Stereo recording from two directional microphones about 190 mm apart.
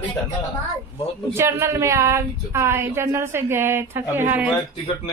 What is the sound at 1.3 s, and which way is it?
Speech, 15° right (ahead or behind).